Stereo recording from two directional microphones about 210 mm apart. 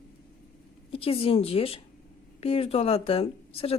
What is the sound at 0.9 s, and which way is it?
Speech, 25° left (ahead or behind).